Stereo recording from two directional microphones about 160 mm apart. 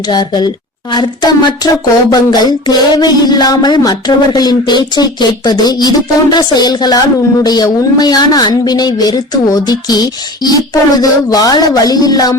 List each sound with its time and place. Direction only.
0.1 s a woman's voice: 25° left (ahead or behind)